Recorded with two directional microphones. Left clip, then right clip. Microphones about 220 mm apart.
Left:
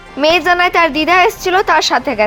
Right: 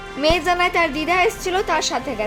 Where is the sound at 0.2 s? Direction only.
20° left (ahead or behind).